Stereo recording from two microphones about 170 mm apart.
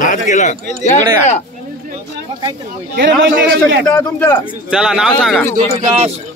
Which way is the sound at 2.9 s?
75° right (ahead or behind).